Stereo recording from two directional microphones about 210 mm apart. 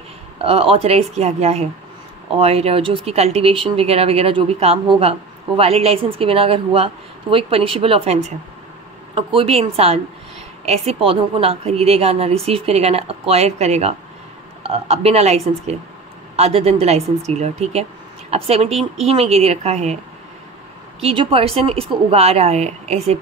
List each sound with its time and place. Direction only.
0.4 s speech: 25° right (ahead or behind)
21.0 s speech: 25° right (ahead or behind)